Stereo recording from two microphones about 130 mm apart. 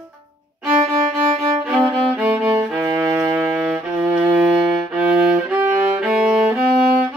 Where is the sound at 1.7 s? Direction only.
15° right (ahead or behind).